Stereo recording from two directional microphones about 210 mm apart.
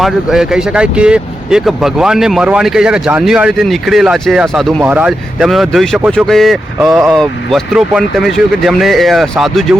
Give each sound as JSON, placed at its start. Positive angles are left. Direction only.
{"t": 0.0, "sound": "speech", "side_deg": 0}